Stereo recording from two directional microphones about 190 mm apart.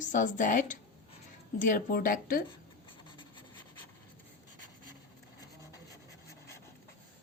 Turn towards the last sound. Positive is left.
turn(degrees=15)  # may be behind; listen again after turning